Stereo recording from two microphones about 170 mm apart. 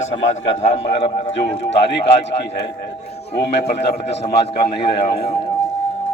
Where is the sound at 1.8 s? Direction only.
90° left.